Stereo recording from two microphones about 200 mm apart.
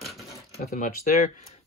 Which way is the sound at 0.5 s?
40° left (ahead or behind).